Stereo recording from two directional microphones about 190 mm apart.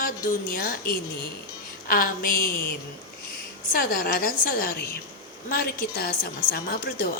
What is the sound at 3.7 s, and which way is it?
A woman's voice, 50° left (ahead or behind).